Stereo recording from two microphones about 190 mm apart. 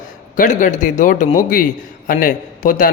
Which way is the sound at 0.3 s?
40° left (ahead or behind).